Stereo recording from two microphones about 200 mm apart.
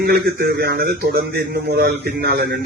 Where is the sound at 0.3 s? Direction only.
50° right (ahead or behind).